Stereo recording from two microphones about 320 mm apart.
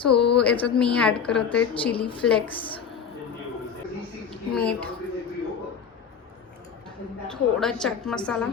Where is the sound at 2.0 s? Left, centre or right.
Centre.